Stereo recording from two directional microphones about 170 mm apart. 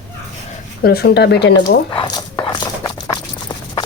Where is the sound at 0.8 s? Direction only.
70° left (ahead or behind).